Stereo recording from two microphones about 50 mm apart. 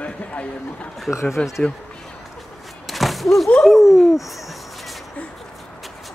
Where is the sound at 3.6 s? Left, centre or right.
Centre.